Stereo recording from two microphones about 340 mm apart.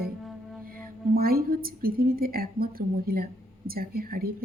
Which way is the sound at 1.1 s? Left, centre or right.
Right.